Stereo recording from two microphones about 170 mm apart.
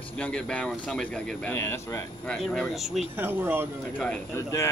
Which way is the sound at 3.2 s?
10° right (ahead or behind).